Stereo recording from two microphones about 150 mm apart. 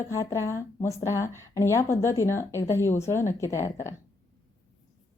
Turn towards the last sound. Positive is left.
turn(degrees=20)  # may be behind; listen again after turning